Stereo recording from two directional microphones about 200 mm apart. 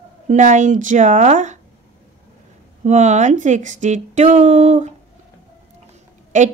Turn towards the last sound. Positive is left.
turn(degrees=-40)  # may be behind; listen again after turning